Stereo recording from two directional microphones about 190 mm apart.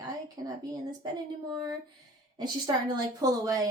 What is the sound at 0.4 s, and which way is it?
Speech, 20° right (ahead or behind).